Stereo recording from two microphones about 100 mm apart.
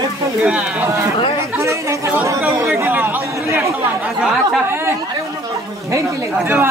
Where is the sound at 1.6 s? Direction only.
30° right (ahead or behind).